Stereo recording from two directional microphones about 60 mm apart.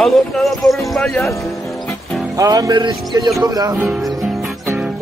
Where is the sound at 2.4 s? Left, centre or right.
Right.